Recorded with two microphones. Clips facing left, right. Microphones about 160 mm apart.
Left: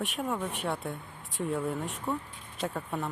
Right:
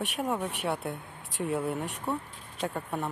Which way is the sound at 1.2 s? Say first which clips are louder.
Right 1 dB; 75° right (ahead or behind).